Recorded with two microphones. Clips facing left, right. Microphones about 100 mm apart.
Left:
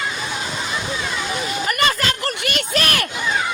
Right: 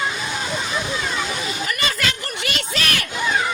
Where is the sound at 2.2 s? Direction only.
55° left (ahead or behind).